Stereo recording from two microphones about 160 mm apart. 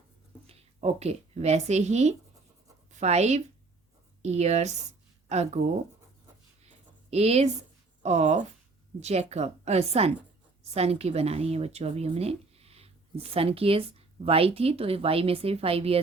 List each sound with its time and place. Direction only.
0.4 s a woman's voice: 40° right (ahead or behind)
6.6 s a sound: 40° right (ahead or behind)
8.0 s a woman's voice: 45° right (ahead or behind)